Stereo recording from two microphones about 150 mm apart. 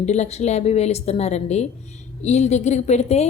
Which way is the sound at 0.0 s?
50° left (ahead or behind).